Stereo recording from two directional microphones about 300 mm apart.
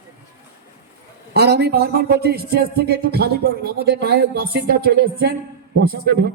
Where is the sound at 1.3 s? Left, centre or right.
Right.